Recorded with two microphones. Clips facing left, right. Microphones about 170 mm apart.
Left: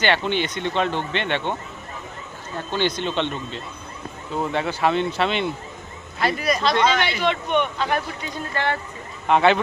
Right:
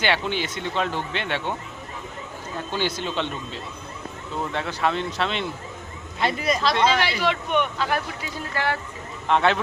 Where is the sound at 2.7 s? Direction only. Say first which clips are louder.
Left 4 dB; 5° right (ahead or behind).